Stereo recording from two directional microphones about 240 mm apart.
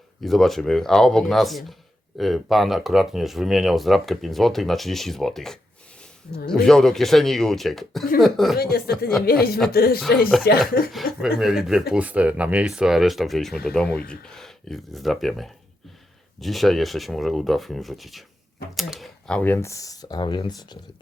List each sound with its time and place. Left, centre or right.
0.2 s speech: centre
6.3 s speech: left
6.7 s speech: centre
8.5 s speech: left
11.2 s speech: centre